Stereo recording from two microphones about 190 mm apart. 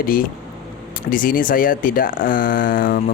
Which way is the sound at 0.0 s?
50° left (ahead or behind).